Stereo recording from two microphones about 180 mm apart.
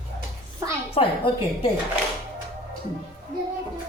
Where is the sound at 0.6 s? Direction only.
30° left (ahead or behind).